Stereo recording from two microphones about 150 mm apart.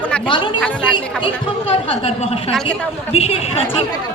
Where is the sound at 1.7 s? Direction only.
35° left (ahead or behind).